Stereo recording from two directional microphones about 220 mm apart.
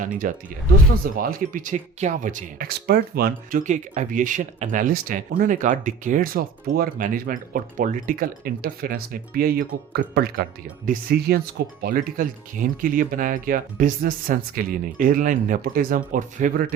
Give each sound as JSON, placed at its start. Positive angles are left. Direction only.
{"t": 0.0, "sound": "speech", "side_deg": -35}